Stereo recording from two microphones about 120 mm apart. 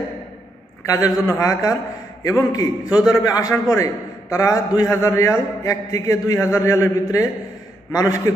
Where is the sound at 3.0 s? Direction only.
30° left (ahead or behind).